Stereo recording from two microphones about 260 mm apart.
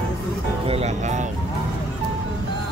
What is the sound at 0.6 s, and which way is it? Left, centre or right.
Speech, right.